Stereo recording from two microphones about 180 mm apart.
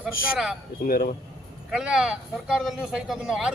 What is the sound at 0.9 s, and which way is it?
Speech, 55° left (ahead or behind).